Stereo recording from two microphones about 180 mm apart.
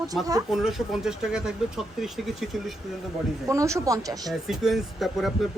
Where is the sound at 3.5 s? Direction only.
15° right (ahead or behind).